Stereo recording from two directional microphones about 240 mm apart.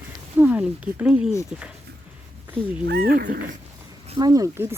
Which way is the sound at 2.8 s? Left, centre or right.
Right.